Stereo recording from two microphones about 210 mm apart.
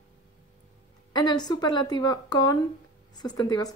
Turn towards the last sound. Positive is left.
turn(degrees=20)  # may be behind; listen again after turning